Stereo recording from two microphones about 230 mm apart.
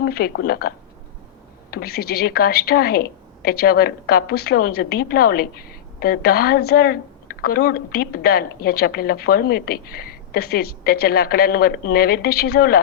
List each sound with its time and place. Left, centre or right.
0.0 s a woman's voice: left
1.7 s a woman's voice: left